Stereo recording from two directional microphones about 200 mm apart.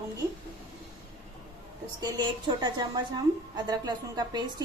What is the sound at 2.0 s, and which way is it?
A woman's voice, 20° right (ahead or behind).